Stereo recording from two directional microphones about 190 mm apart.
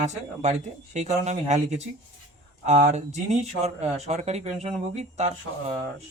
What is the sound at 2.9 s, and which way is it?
Speech, 35° right (ahead or behind).